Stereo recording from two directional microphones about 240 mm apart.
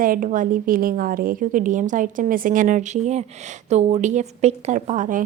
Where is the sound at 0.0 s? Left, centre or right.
Right.